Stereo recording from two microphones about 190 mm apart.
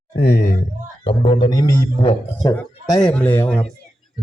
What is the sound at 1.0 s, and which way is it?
A man's voice, 25° left (ahead or behind).